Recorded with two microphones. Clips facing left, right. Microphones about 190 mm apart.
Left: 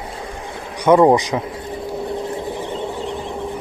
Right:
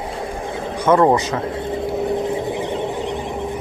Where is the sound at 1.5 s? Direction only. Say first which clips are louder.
Right 4 dB; 25° right (ahead or behind).